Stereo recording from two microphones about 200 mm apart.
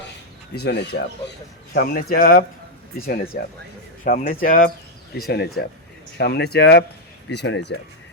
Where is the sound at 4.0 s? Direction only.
40° left (ahead or behind); by 7.7 s 60° left (ahead or behind).